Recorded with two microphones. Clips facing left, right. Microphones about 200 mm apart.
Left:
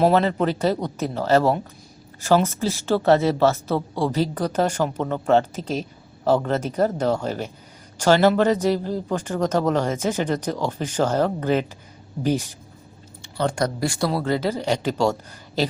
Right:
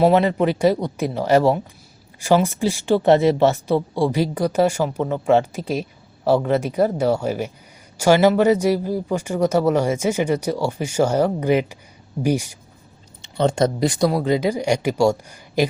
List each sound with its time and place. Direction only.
0.0 s speech: 15° right (ahead or behind)
13.2 s speech: 25° right (ahead or behind)